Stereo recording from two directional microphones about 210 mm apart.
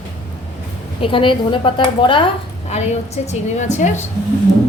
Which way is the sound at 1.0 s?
25° left (ahead or behind).